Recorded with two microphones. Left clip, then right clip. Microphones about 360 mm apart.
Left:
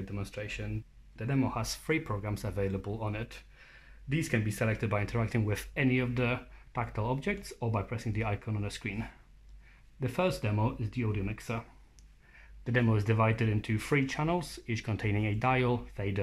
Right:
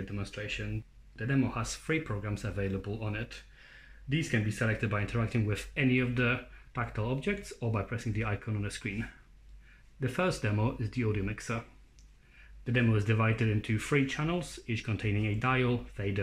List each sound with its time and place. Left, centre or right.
0.1 s speech: centre
12.7 s speech: centre